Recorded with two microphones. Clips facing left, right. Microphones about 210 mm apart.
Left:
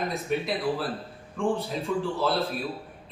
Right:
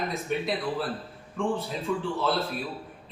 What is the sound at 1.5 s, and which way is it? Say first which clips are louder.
Speech: left 1 dB; centre (ahead or behind).